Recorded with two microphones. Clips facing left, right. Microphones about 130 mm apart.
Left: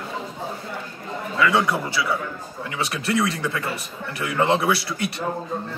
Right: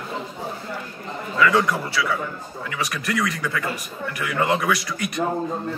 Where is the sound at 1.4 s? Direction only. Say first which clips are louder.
Right 1 dB; 20° left (ahead or behind).